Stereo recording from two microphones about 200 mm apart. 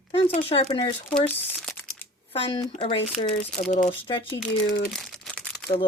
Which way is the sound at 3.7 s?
40° left (ahead or behind).